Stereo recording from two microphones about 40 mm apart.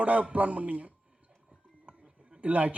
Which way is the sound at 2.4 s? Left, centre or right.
Right.